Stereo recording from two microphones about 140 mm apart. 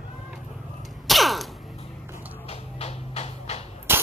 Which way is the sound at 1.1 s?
Centre (ahead or behind).